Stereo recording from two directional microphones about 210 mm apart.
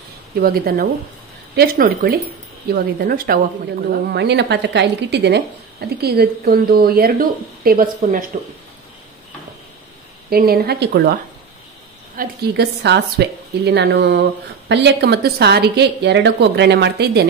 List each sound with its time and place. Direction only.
0.4 s a woman's voice: 45° right (ahead or behind)
10.3 s a woman's voice: 45° right (ahead or behind)
12.2 s a woman's voice: 55° right (ahead or behind)